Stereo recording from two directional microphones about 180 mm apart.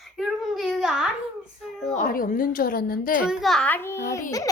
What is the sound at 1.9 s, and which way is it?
A woman's voice, 50° left (ahead or behind).